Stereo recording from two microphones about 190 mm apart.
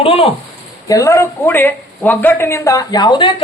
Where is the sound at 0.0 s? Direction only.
30° left (ahead or behind).